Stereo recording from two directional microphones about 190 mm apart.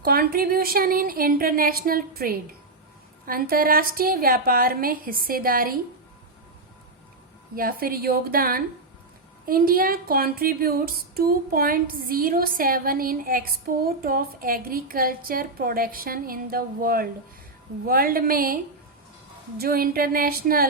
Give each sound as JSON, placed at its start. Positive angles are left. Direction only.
{"t": 0.0, "sound": "speech", "side_deg": -50}
{"t": 7.5, "sound": "speech", "side_deg": -50}